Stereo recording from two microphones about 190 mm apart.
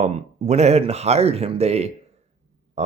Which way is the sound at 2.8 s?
35° right (ahead or behind).